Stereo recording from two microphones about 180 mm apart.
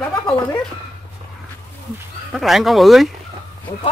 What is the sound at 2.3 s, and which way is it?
Speech, centre (ahead or behind).